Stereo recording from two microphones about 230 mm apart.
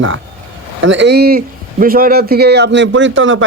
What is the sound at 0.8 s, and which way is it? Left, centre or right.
A man's voice, right.